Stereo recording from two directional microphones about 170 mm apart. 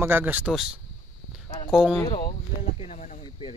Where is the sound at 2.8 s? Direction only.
40° left (ahead or behind).